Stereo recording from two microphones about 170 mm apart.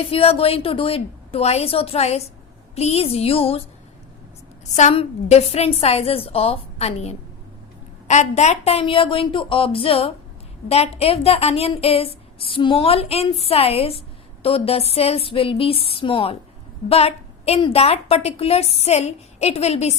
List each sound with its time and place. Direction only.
0.1 s a woman's voice: 35° left (ahead or behind)
4.7 s a woman's voice: 45° left (ahead or behind)